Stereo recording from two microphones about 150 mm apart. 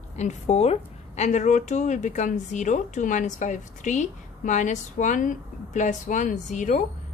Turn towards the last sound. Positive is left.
turn(degrees=55)  # may be behind; listen again after turning